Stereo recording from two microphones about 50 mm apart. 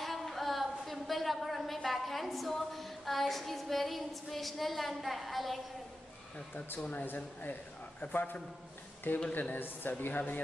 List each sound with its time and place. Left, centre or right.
0.0 s a woman's voice: centre
6.8 s a man's voice: left